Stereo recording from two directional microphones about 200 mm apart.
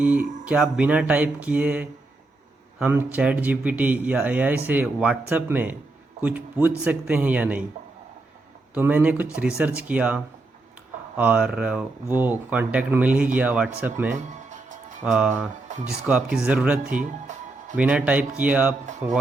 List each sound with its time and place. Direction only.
0.0 s speech: 5° right (ahead or behind)
8.7 s speech: 5° right (ahead or behind)
14.1 s music: 40° right (ahead or behind)
15.0 s speech: 5° right (ahead or behind)
16.9 s music: 40° right (ahead or behind)
17.7 s speech: 5° right (ahead or behind)